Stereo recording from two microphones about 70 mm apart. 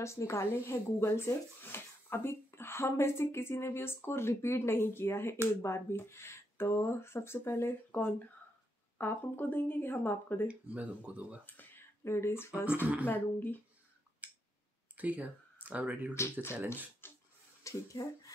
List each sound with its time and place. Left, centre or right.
0.0 s speech: left
7.9 s speech: left
10.5 s speech: centre
12.0 s speech: left
14.2 s a sound: right
15.0 s speech: right
16.2 s speech: left
17.0 s a sound: left
17.6 s speech: left